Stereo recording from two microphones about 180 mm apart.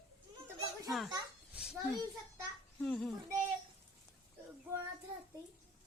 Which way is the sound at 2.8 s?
Centre (ahead or behind).